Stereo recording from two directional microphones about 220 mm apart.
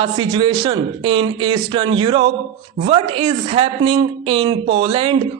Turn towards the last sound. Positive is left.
turn(degrees=-25)  # may be behind; listen again after turning